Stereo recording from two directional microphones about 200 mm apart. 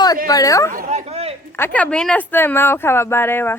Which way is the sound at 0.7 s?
40° right (ahead or behind).